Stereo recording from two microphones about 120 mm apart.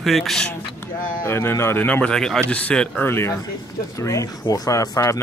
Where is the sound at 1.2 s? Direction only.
20° left (ahead or behind).